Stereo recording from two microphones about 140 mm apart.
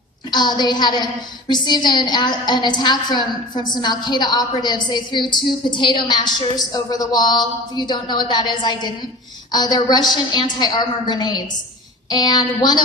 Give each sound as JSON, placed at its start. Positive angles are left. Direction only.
{"t": 0.3, "sound": "a woman's voice", "side_deg": 30}